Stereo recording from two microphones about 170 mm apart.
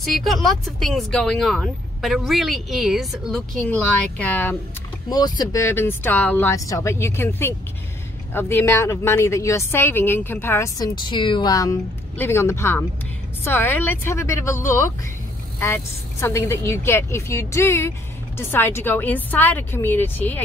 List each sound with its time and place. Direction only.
0.0 s speech: centre (ahead or behind)
5.1 s speech: 20° left (ahead or behind)
11.1 s speech: 30° left (ahead or behind)
15.6 s speech: 15° left (ahead or behind)